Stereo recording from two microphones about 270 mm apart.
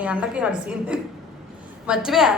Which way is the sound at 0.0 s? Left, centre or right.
Centre.